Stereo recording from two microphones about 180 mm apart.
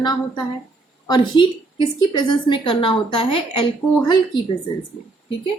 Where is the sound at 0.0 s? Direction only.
25° left (ahead or behind).